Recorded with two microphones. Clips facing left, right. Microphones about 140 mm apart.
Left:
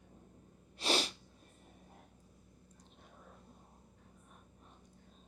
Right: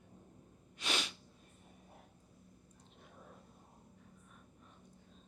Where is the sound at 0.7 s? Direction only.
35° left (ahead or behind).